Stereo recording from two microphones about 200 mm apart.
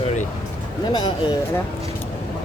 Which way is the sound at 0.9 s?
20° left (ahead or behind).